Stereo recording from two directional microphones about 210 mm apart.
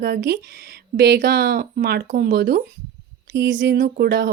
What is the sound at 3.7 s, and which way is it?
Speech, 45° right (ahead or behind).